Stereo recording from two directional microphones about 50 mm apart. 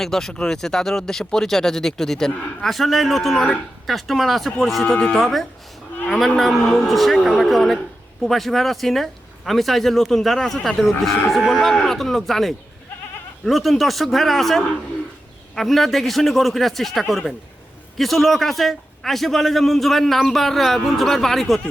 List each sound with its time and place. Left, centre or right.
0.0 s speech: centre
4.8 s speech: centre
5.1 s speech: centre